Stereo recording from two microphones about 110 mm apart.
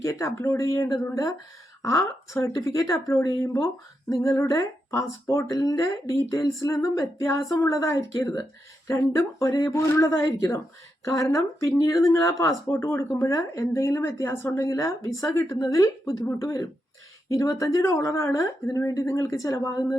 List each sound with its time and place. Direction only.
0.0 s speech: 30° left (ahead or behind)
10.2 s speech: 35° left (ahead or behind)